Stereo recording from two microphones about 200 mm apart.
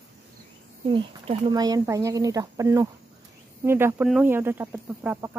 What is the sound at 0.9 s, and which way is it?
Speech, 30° right (ahead or behind).